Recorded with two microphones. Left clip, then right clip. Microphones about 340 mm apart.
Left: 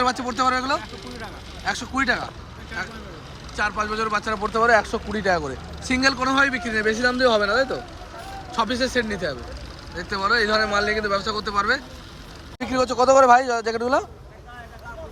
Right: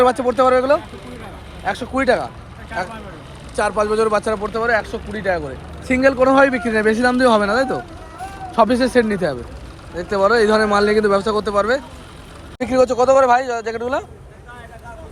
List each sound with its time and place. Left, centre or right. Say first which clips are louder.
0.0 s speech: right 7 dB; centre
4.6 s speech: left 3 dB; centre
5.9 s speech: right 7 dB; centre